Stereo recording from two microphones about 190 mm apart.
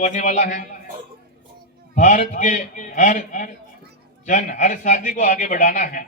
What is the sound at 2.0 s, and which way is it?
A man's voice, 40° left (ahead or behind).